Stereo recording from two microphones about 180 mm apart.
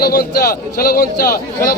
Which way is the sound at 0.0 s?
60° left (ahead or behind).